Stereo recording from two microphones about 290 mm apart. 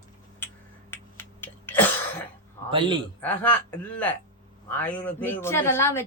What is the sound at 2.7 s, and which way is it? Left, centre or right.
Speech, centre.